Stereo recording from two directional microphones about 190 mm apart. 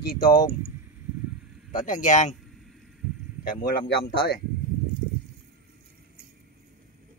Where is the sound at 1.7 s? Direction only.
40° left (ahead or behind).